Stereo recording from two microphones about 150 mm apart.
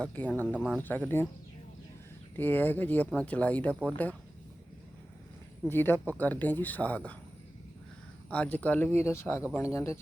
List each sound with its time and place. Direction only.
0.0 s speech: 10° left (ahead or behind)
2.3 s speech: 15° left (ahead or behind)
5.6 s speech: 15° left (ahead or behind)
8.3 s speech: 10° left (ahead or behind)